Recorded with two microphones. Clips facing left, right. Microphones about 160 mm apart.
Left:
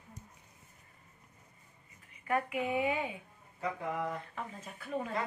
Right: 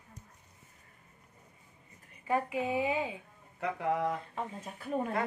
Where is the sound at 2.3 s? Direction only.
25° right (ahead or behind).